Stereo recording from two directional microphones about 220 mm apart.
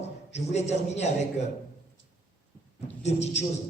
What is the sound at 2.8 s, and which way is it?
Speech, 30° left (ahead or behind).